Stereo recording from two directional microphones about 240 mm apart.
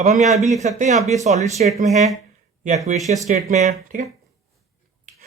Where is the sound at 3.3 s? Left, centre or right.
Right.